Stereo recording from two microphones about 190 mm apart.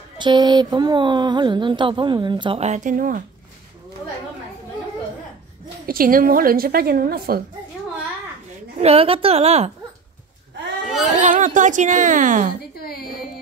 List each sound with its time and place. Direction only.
0.2 s speech: 25° right (ahead or behind); by 3.3 s 45° right (ahead or behind)
5.9 s a woman's voice: 50° right (ahead or behind)
8.7 s a child's voice: 30° right (ahead or behind)
11.1 s a child's voice: 40° right (ahead or behind)
12.7 s a sound: 55° left (ahead or behind)